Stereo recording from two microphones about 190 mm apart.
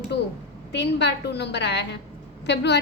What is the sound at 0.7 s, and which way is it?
A woman's voice, 65° left (ahead or behind).